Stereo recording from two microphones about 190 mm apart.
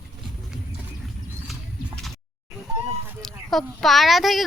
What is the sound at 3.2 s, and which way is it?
Speech, centre (ahead or behind).